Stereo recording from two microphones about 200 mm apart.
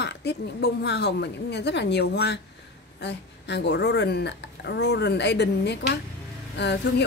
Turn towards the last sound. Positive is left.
turn(degrees=60)  # may be behind; listen again after turning